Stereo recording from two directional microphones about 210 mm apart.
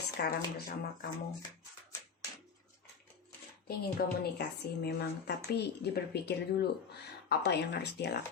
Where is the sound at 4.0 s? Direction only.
50° left (ahead or behind).